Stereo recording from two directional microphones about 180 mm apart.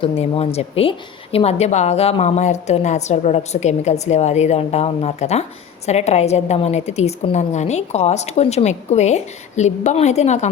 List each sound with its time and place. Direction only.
0.0 s a woman's voice: 35° left (ahead or behind)